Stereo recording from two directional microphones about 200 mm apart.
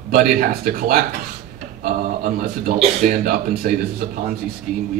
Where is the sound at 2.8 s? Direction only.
40° right (ahead or behind).